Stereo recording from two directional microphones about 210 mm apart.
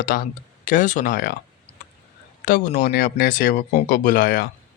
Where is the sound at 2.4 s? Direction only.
40° left (ahead or behind).